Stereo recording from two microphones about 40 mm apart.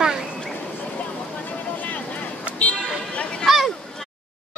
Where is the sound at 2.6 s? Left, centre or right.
Left.